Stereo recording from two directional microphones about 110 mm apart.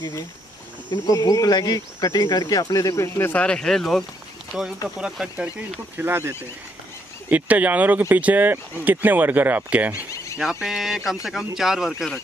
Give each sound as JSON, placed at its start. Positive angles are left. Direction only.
{"t": 1.0, "sound": "speech", "side_deg": 30}
{"t": 5.9, "sound": "speech", "side_deg": -20}
{"t": 10.1, "sound": "goat", "side_deg": 30}
{"t": 10.4, "sound": "speech", "side_deg": -5}